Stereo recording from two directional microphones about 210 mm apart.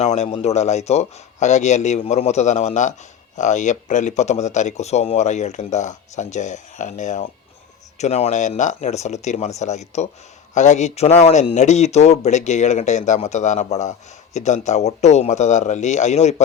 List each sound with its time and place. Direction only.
0.0 s speech: 30° left (ahead or behind)